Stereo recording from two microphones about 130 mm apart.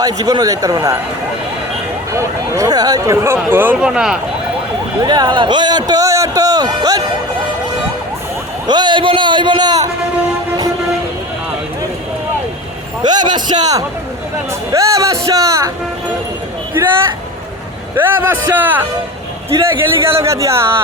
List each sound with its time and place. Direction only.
0.0 s speech: 30° right (ahead or behind)
2.1 s speech: 25° right (ahead or behind); by 4.2 s 5° right (ahead or behind)
4.9 s a man's voice: 35° right (ahead or behind)
8.6 s a man's voice: 35° right (ahead or behind)
13.0 s a man's voice: 35° right (ahead or behind)
16.7 s speech: 20° right (ahead or behind)